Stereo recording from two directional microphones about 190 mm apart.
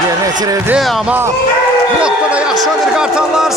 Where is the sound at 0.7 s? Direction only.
Centre (ahead or behind).